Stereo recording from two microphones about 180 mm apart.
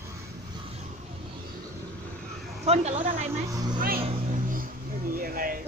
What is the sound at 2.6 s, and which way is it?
Speech, 35° right (ahead or behind).